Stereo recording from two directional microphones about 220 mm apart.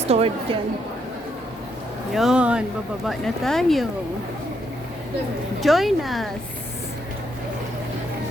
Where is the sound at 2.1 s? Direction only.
Centre (ahead or behind).